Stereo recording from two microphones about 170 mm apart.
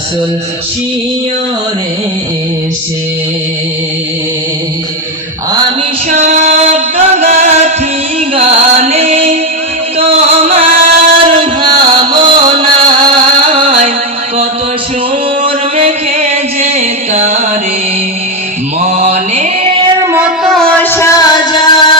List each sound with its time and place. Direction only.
6.1 s music: 40° right (ahead or behind)
10.7 s music: 45° right (ahead or behind)
11.3 s music: 30° right (ahead or behind)
15.8 s music: 40° right (ahead or behind)
18.9 s music: 40° right (ahead or behind)
20.0 s music: 15° right (ahead or behind)
20.4 s music: centre (ahead or behind); by 21.9 s 30° left (ahead or behind)